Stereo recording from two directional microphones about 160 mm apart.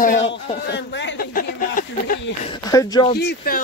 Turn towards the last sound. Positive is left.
turn(degrees=80)